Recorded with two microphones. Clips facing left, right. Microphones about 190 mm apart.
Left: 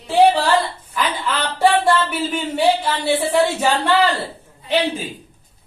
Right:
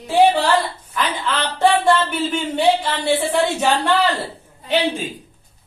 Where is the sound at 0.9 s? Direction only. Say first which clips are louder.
Even; 5° left (ahead or behind).